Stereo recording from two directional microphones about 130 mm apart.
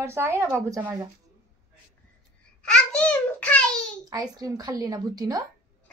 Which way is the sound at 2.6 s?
10° left (ahead or behind).